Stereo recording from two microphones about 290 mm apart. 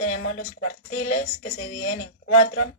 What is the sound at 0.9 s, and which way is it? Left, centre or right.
Speech, left.